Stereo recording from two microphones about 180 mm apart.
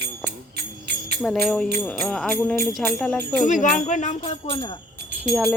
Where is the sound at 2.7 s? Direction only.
10° left (ahead or behind).